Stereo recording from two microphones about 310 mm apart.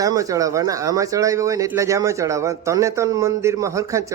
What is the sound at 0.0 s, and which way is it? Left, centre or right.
A man's voice, centre.